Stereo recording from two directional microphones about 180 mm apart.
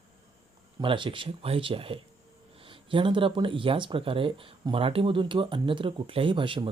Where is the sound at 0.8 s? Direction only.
30° right (ahead or behind).